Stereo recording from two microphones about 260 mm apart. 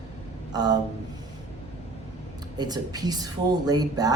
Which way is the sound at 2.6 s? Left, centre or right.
Centre.